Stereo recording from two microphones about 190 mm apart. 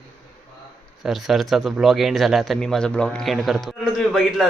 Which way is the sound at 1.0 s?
Centre (ahead or behind).